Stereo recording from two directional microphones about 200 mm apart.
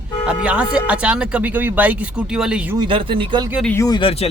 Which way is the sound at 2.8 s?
25° right (ahead or behind).